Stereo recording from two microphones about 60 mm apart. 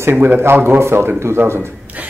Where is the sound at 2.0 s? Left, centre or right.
Right.